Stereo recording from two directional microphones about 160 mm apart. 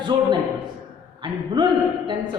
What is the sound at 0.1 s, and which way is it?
Speech, 30° right (ahead or behind).